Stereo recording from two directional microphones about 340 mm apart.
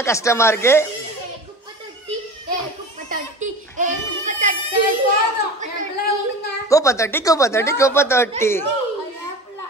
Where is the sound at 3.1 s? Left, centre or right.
Right.